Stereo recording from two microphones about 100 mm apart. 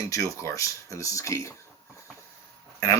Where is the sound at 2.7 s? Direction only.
30° left (ahead or behind).